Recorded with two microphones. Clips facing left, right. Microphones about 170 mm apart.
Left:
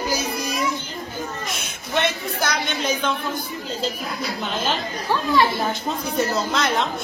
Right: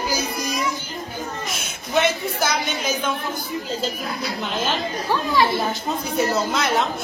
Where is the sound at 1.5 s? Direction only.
5° right (ahead or behind).